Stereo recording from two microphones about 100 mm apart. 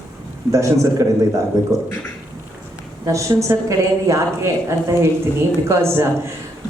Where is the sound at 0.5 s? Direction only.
30° right (ahead or behind).